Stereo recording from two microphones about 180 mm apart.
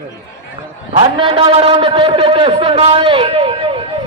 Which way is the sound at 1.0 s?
30° right (ahead or behind).